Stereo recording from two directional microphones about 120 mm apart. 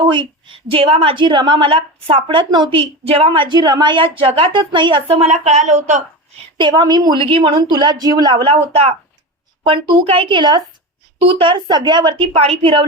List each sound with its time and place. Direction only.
0.1 s a woman's voice: 40° right (ahead or behind); by 6.0 s 80° right
6.6 s a woman's voice: 35° right (ahead or behind)
7.2 s a woman's voice: 50° right (ahead or behind)